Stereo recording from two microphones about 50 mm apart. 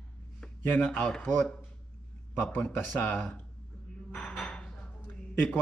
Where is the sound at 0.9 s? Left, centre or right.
Centre.